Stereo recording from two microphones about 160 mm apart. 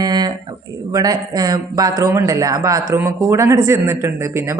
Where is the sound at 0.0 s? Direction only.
25° right (ahead or behind).